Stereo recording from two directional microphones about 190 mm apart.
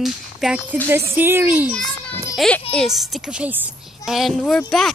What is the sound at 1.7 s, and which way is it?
Children playing, 5° left (ahead or behind).